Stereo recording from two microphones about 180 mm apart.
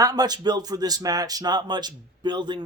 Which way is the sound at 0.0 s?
20° right (ahead or behind).